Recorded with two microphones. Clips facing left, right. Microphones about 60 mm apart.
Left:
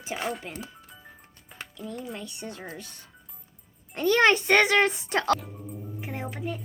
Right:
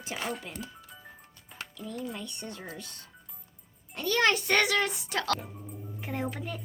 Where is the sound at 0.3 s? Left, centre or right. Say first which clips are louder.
Left 3 dB; centre.